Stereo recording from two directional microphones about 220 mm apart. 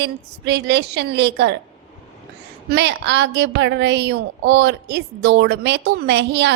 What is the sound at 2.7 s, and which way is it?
A woman's voice, 50° right (ahead or behind).